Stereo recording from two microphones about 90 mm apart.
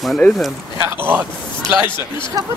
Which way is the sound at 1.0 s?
20° right (ahead or behind).